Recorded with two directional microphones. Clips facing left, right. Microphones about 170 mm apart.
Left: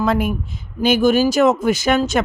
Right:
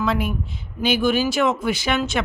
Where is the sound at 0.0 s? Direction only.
45° left (ahead or behind).